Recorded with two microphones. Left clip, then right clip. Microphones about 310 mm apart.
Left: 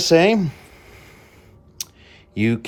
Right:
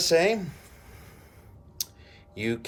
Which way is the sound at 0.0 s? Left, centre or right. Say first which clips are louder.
Left 7 dB; left.